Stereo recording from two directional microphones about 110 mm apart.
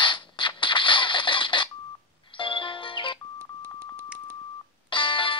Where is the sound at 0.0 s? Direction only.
45° left (ahead or behind).